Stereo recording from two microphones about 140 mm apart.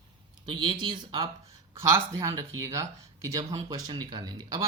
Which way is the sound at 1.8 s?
20° right (ahead or behind).